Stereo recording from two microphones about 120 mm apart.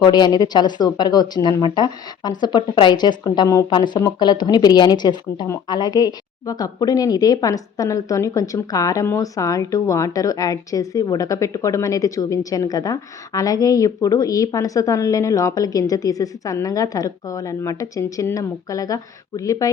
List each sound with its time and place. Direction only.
0.0 s speech: 35° left (ahead or behind)
3.7 s speech: 40° left (ahead or behind)